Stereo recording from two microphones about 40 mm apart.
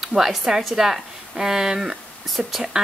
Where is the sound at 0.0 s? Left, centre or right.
Centre.